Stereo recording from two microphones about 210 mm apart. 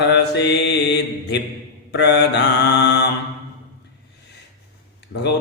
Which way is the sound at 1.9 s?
55° left (ahead or behind).